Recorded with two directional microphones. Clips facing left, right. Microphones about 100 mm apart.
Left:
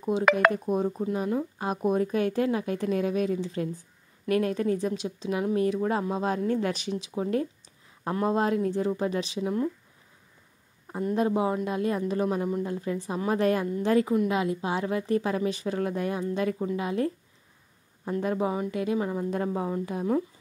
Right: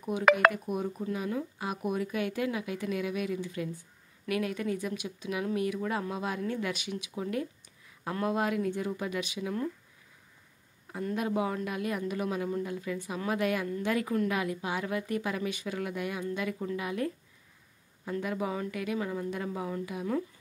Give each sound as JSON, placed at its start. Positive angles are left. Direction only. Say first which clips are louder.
{"t": 0.0, "sound": "speech", "louder": "left 2 dB", "side_deg": 30}
{"t": 10.9, "sound": "speech", "louder": "left 6 dB", "side_deg": 30}
{"t": 18.2, "sound": "speech", "louder": "left 6 dB", "side_deg": 35}